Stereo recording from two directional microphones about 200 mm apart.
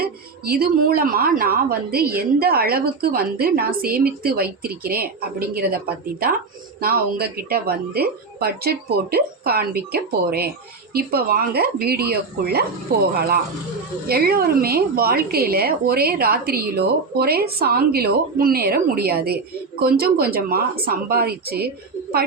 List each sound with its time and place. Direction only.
0.0 s a woman's voice: 50° right (ahead or behind)
6.8 s a woman's voice: 50° right (ahead or behind)